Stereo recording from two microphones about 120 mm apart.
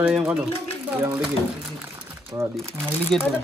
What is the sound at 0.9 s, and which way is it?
Speech, 15° right (ahead or behind).